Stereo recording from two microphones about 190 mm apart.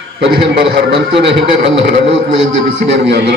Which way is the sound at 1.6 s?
70° right (ahead or behind).